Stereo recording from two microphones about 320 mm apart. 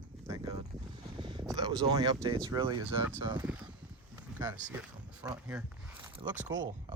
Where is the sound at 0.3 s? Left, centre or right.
Centre.